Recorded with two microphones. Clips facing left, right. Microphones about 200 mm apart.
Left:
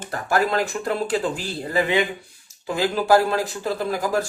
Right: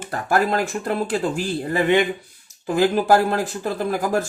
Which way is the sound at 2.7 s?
50° right (ahead or behind).